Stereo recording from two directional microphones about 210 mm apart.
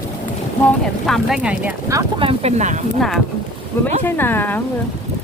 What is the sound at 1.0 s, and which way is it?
Speech, centre (ahead or behind).